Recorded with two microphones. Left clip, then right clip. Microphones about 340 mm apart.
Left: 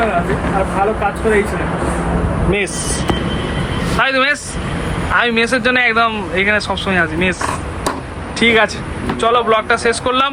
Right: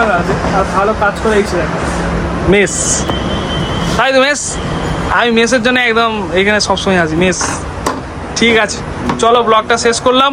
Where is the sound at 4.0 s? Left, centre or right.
Centre.